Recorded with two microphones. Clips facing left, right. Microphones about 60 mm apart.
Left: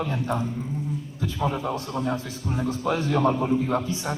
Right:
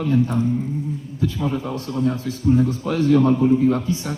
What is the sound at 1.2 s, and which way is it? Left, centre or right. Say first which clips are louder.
A man's voice: right 4 dB; centre.